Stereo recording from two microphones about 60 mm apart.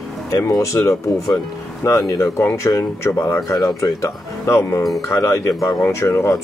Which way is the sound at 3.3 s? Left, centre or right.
Left.